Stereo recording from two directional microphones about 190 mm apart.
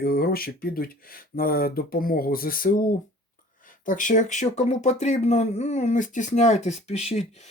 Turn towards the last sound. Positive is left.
turn(degrees=35)  # may be behind; listen again after turning